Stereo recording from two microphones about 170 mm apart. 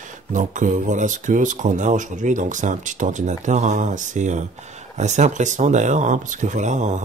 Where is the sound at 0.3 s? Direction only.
50° right (ahead or behind).